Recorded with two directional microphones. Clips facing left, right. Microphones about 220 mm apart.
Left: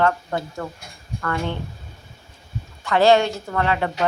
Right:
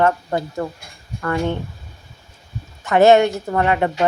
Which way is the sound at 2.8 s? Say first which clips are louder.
Right 4 dB; 20° right (ahead or behind).